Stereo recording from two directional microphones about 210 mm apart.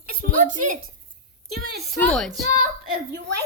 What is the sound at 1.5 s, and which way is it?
Speech, 50° right (ahead or behind).